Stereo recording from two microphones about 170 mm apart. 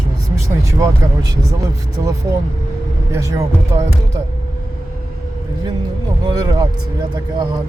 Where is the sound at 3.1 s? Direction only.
20° right (ahead or behind).